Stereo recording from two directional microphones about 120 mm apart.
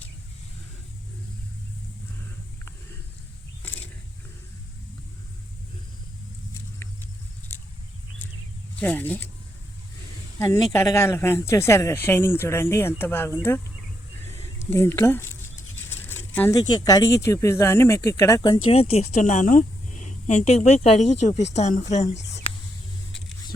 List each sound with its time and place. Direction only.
3.6 s wild animals: 10° left (ahead or behind)
8.8 s speech: 15° left (ahead or behind)
10.3 s speech: 25° left (ahead or behind)
14.3 s a sound: 20° left (ahead or behind)
16.6 s speech: 35° left (ahead or behind)
18.7 s a woman's voice: 60° left (ahead or behind)